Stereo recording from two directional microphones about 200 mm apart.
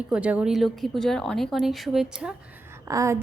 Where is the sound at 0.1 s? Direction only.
5° right (ahead or behind).